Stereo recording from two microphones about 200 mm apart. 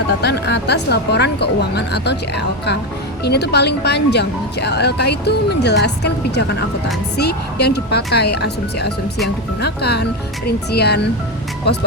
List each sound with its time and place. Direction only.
0.2 s speech: 55° left (ahead or behind)